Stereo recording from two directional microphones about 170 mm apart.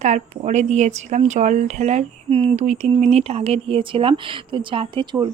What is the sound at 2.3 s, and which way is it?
Speech, 35° right (ahead or behind).